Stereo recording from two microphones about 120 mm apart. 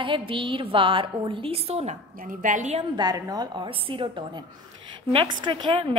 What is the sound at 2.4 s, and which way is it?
Speech, 90° right.